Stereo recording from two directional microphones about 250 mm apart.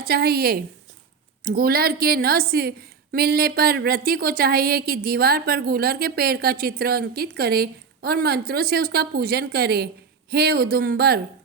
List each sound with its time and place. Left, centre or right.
0.0 s a woman's voice: right